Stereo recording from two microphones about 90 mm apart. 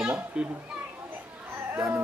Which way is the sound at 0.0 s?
15° right (ahead or behind).